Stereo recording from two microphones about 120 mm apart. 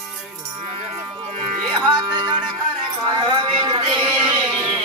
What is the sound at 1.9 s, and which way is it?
Music, 40° right (ahead or behind).